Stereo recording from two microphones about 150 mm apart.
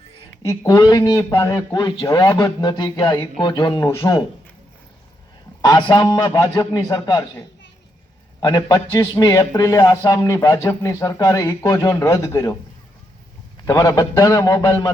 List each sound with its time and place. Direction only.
0.4 s speech: 25° left (ahead or behind)
5.6 s a man's voice: 30° left (ahead or behind)
13.7 s speech: 20° left (ahead or behind)